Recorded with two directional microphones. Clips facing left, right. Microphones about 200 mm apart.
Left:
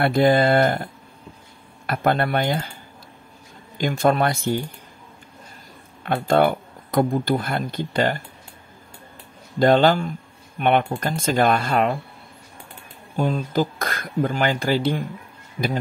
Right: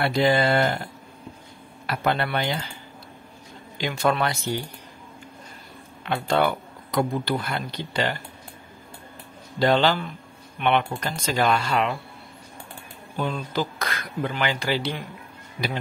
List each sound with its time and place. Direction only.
0.0 s speech: 50° left (ahead or behind)
1.9 s speech: 50° left (ahead or behind)
3.7 s speech: 50° left (ahead or behind)
6.0 s speech: 50° left (ahead or behind)
9.6 s speech: 50° left (ahead or behind)
13.1 s speech: 45° left (ahead or behind)